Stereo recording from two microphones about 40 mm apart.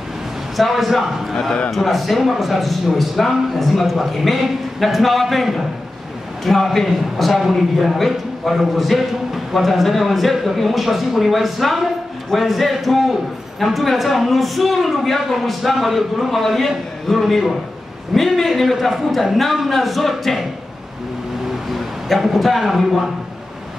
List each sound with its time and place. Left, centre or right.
0.6 s a man's voice: centre
1.3 s a man's voice: centre
21.7 s a man's voice: centre